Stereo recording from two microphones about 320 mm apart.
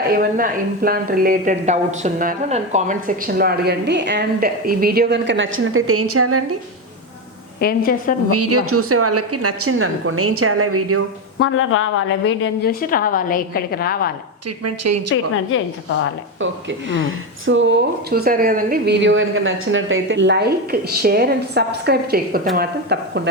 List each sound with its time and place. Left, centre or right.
0.1 s speech: right
7.6 s a woman's voice: left
8.3 s a woman's voice: right
11.3 s a woman's voice: left
14.6 s a woman's voice: right
16.4 s speech: right